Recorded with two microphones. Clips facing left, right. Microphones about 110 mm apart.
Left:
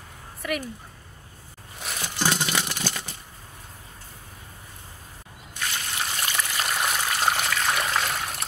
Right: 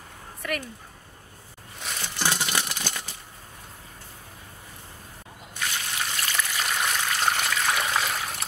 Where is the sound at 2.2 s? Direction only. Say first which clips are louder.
Left 2 dB; 20° left (ahead or behind).